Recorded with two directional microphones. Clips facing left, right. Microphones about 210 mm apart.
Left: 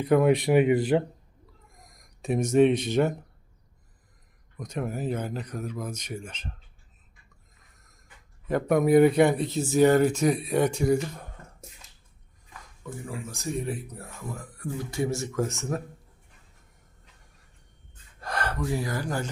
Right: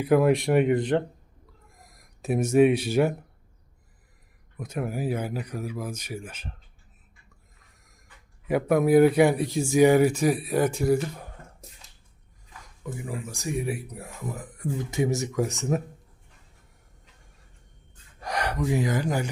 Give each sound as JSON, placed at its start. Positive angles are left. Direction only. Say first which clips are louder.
{"t": 0.0, "sound": "speech", "louder": "even", "side_deg": -5}
{"t": 4.5, "sound": "speech", "louder": "right 1 dB", "side_deg": -5}
{"t": 8.4, "sound": "speech", "louder": "right 1 dB", "side_deg": -5}
{"t": 12.8, "sound": "speech", "louder": "right 2 dB", "side_deg": -15}
{"t": 18.2, "sound": "speech", "louder": "right 2 dB", "side_deg": -15}